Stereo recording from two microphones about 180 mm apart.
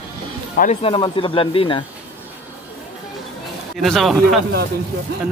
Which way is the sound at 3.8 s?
Centre (ahead or behind).